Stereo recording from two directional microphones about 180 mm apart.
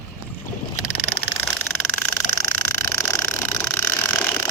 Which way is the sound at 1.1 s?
5° left (ahead or behind).